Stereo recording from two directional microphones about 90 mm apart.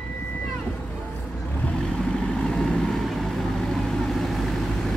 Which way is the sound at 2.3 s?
10° left (ahead or behind).